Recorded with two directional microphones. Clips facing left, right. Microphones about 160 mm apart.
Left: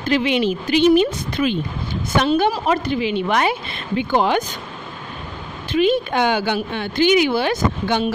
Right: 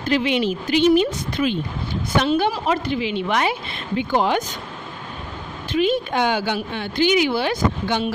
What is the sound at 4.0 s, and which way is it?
Speech, 70° left (ahead or behind).